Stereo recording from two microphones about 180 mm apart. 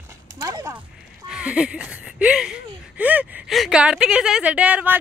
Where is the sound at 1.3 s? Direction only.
5° right (ahead or behind).